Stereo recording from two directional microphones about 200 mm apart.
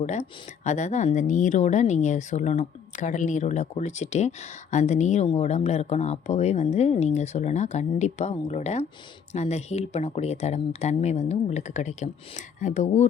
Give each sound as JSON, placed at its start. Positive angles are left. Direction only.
{"t": 0.0, "sound": "speech", "side_deg": 35}